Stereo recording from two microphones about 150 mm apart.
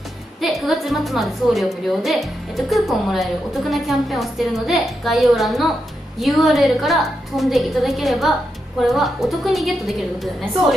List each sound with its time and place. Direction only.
0.4 s a woman's voice: centre (ahead or behind)